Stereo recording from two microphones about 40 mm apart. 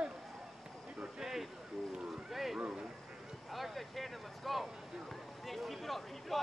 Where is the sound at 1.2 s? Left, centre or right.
Centre.